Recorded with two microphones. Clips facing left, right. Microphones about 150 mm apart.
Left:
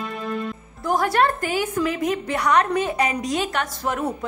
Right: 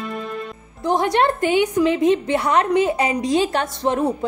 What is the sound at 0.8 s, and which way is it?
A woman's voice, 20° right (ahead or behind).